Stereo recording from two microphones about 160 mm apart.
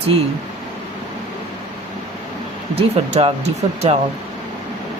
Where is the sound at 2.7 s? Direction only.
40° right (ahead or behind).